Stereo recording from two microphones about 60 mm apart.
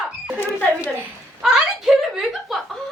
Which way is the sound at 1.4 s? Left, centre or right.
Centre.